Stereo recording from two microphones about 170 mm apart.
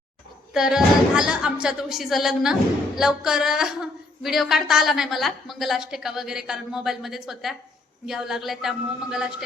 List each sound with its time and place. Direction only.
0.5 s a woman's voice: 5° right (ahead or behind)